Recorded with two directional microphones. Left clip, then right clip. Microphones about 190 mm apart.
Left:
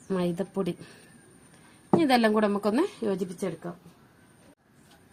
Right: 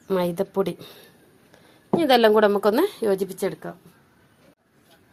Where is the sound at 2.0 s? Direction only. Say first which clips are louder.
Right 8 dB; 30° right (ahead or behind).